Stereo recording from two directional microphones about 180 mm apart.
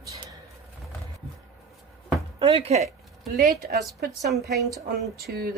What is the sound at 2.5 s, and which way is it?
Speech, 35° right (ahead or behind).